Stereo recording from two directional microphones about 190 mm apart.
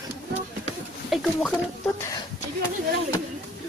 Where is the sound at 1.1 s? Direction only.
Centre (ahead or behind).